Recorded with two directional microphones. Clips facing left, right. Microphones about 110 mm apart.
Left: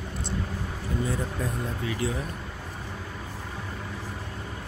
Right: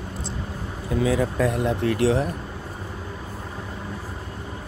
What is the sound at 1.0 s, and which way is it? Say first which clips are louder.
Speech: right 10 dB; 90° right.